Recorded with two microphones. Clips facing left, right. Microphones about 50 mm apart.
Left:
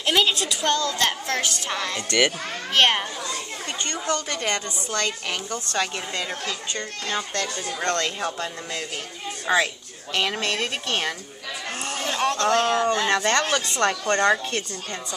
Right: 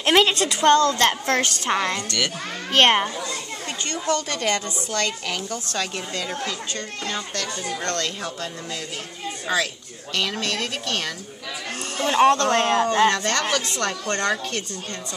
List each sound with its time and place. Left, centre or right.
0.0 s a woman's voice: right
2.0 s speech: left
2.7 s speech: right
3.8 s a woman's voice: centre
9.5 s speech: left
12.0 s speech: right
13.1 s a woman's voice: centre